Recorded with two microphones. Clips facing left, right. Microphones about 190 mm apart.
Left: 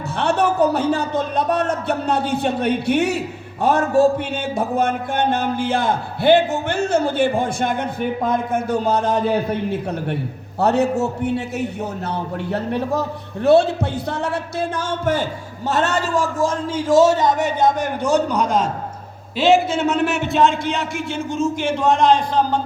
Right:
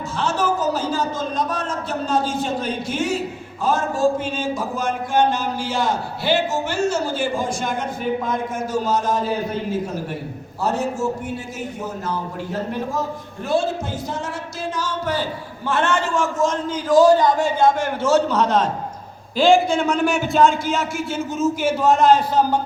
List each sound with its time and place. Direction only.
0.2 s mantra: 65° left (ahead or behind)
10.6 s a man's voice: 65° left (ahead or behind); by 22.6 s 10° right (ahead or behind)